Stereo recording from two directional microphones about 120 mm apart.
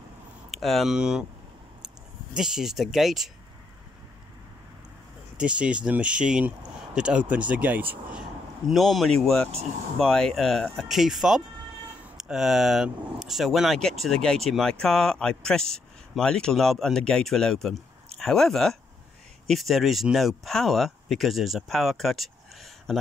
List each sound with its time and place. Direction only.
0.5 s speech: centre (ahead or behind)
2.3 s speech: 5° right (ahead or behind)
5.4 s speech: 10° right (ahead or behind)